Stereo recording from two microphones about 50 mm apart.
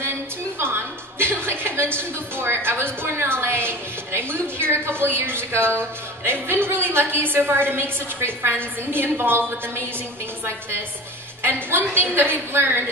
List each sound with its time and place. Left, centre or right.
0.6 s music: right
2.0 s a woman's voice: right
11.4 s a woman's voice: right